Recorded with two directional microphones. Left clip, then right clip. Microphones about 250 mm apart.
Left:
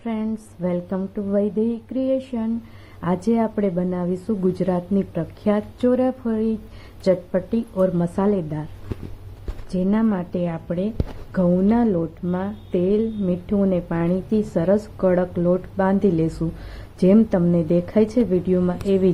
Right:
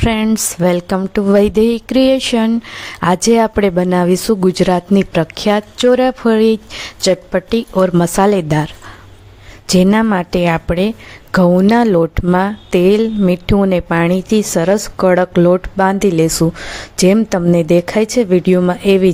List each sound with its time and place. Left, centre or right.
0.0 s speech: right
9.6 s a woman's voice: right